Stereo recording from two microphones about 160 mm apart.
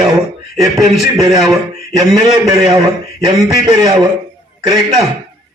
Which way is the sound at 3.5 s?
30° right (ahead or behind).